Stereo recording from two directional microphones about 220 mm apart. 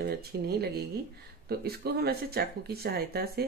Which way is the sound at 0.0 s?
45° right (ahead or behind).